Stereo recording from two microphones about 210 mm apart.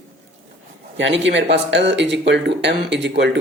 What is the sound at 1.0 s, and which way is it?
Speech, 60° right (ahead or behind).